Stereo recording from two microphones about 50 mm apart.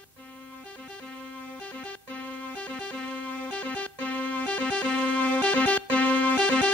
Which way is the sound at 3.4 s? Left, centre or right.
Left.